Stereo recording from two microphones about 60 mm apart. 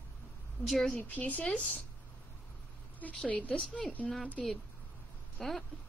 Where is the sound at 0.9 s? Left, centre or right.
Left.